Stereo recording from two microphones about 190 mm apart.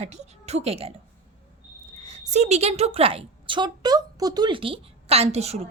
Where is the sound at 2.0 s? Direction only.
35° right (ahead or behind).